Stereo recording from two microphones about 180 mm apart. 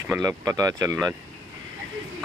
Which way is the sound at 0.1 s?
15° right (ahead or behind).